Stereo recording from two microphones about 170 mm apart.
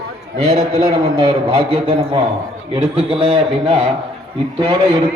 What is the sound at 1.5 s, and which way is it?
A man's voice, 30° right (ahead or behind).